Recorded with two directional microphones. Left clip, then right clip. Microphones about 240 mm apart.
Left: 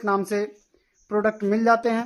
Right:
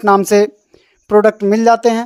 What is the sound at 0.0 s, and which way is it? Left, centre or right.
Speech, right.